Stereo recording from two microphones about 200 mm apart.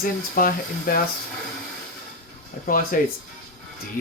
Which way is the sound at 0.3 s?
45° left (ahead or behind).